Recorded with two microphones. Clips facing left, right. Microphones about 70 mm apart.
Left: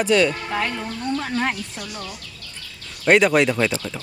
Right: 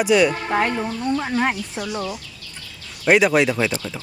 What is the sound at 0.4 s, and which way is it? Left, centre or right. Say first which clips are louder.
Speech: right 4 dB; right.